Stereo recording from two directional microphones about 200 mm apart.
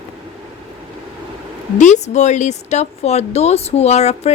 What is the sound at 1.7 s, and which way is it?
Speech, 35° left (ahead or behind).